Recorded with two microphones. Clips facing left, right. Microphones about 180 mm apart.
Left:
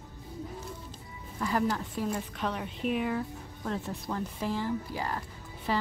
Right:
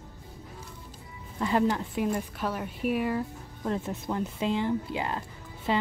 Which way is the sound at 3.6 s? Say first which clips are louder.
Right 4 dB; 20° right (ahead or behind).